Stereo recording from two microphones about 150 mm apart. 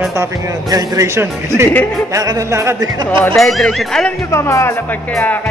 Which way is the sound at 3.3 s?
Centre (ahead or behind).